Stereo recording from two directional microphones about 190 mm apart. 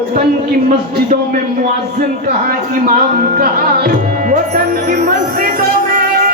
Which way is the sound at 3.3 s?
55° right (ahead or behind).